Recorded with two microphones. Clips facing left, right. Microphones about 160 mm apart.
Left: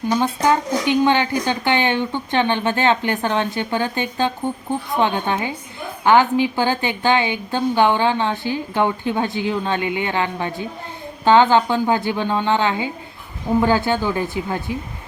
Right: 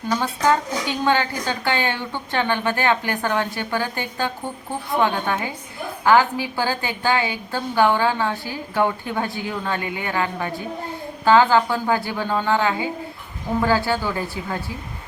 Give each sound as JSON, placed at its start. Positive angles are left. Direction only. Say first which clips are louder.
{"t": 0.1, "sound": "a woman's voice", "louder": "left 2 dB", "side_deg": 15}